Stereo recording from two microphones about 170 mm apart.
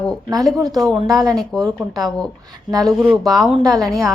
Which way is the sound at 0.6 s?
20° right (ahead or behind).